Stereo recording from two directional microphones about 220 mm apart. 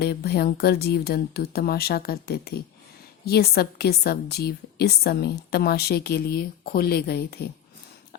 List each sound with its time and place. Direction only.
0.0 s a woman's voice: 45° left (ahead or behind)